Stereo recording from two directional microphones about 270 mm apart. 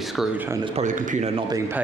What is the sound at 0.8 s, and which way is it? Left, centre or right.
Speech, right.